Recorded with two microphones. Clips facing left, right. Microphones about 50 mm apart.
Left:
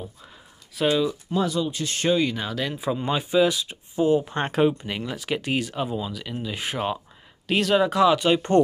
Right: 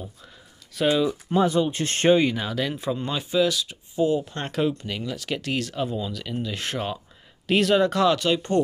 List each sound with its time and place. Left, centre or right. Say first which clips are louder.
0.7 s speech: even; centre
1.3 s speech: right 6 dB; right
2.3 s speech: right 1 dB; centre
2.9 s speech: left 2 dB; centre
7.4 s speech: right 1 dB; centre